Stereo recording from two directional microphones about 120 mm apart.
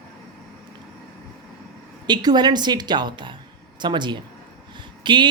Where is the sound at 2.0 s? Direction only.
35° right (ahead or behind).